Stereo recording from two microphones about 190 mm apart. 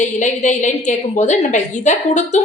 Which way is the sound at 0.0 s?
40° left (ahead or behind).